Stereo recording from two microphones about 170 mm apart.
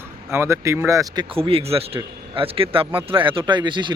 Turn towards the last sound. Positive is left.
turn(degrees=-25)  # may be behind; listen again after turning